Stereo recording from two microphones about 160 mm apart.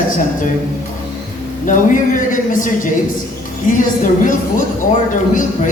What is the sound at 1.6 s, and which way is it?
Speech, 55° left (ahead or behind).